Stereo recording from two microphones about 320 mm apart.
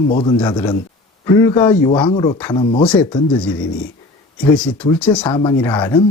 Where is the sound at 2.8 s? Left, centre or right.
Centre.